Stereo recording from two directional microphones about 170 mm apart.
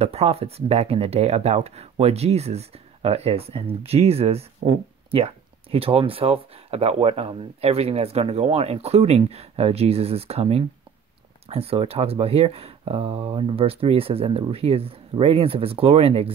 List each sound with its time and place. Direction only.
0.0 s speech: 40° right (ahead or behind)